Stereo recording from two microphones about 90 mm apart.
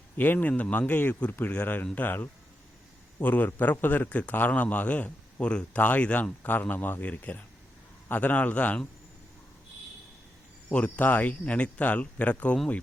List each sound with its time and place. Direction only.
0.2 s a man's voice: 20° left (ahead or behind)
10.7 s a man's voice: 15° left (ahead or behind)